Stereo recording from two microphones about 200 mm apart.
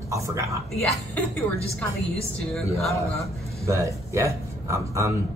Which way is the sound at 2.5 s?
Centre (ahead or behind).